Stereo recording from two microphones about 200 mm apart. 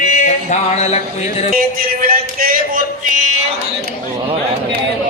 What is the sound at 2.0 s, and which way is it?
Speech, 45° right (ahead or behind).